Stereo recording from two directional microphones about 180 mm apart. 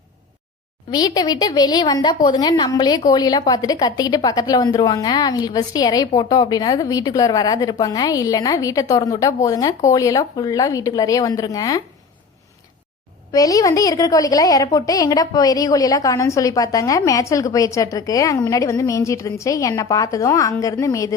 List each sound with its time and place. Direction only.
0.9 s a woman's voice: 20° left (ahead or behind)
13.3 s a woman's voice: 20° left (ahead or behind)